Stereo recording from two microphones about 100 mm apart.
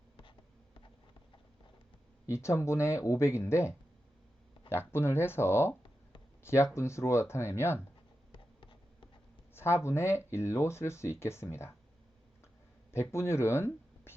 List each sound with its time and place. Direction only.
0.2 s writing: 55° left (ahead or behind)
2.2 s speech: 30° left (ahead or behind)
8.3 s a sound: 55° left (ahead or behind)
9.8 s speech: 25° left (ahead or behind)
12.9 s speech: 25° left (ahead or behind)